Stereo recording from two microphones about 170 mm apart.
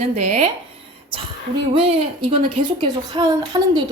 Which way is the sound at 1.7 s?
30° right (ahead or behind).